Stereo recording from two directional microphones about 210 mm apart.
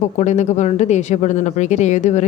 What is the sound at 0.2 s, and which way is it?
Speech, 35° left (ahead or behind).